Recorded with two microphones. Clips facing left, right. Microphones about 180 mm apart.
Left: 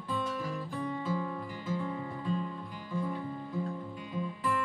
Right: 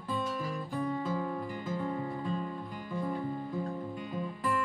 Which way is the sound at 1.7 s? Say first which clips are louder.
Even; 45° right (ahead or behind).